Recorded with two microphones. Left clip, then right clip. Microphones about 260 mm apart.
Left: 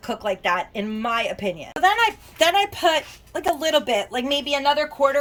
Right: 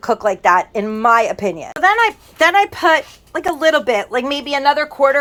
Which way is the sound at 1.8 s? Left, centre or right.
Right.